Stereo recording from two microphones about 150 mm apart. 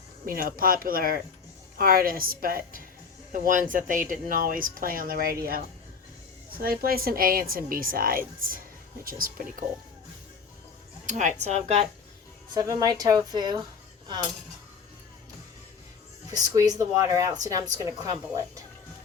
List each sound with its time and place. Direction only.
0.3 s a woman's voice: 70° right (ahead or behind)
3.3 s a woman's voice: 60° right (ahead or behind)
11.0 s a woman's voice: 55° right (ahead or behind)
12.5 s speech: 25° right (ahead or behind)
16.3 s speech: 25° right (ahead or behind)